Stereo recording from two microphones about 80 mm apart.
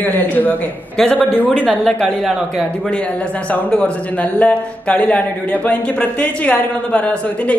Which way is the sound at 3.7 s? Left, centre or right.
Centre.